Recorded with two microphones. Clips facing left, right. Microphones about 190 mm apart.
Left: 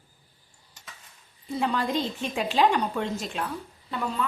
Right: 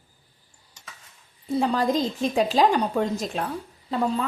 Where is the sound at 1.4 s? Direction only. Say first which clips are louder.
Right 5 dB; 40° right (ahead or behind).